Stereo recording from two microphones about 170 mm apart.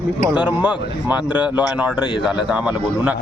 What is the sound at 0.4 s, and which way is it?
A man's voice, 10° right (ahead or behind).